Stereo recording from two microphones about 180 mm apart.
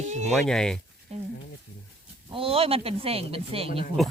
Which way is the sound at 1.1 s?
35° right (ahead or behind).